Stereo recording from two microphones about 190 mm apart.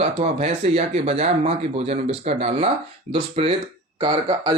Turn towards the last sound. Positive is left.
turn(degrees=-25)  # may be behind; listen again after turning